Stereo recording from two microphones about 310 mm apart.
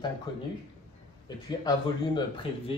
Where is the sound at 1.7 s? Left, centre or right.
Centre.